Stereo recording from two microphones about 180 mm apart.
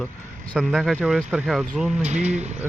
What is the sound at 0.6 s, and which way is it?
Speech, centre (ahead or behind).